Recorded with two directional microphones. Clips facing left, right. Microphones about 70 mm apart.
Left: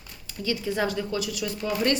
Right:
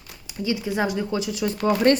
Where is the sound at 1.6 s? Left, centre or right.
Right.